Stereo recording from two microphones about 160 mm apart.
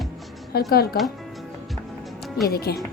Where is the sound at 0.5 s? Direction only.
75° left (ahead or behind).